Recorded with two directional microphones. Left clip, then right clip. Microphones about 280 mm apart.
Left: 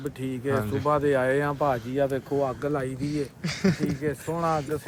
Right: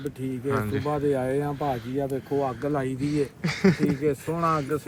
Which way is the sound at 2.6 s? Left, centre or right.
Centre.